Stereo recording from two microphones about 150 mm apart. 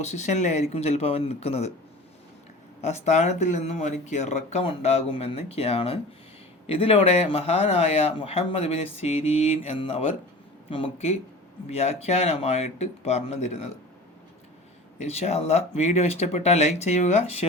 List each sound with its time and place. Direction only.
0.0 s speech: 50° left (ahead or behind)
2.8 s speech: 50° left (ahead or behind)
14.9 s speech: 45° left (ahead or behind)